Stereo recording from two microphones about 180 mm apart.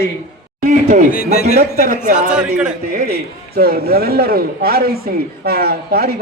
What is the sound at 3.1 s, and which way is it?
Speech, 60° right (ahead or behind).